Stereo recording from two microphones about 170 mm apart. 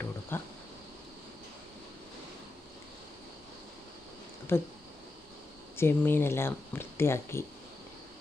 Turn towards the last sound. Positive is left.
turn(degrees=15)  # may be behind; listen again after turning